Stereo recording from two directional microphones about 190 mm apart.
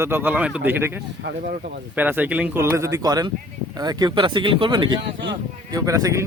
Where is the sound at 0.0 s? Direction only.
10° right (ahead or behind).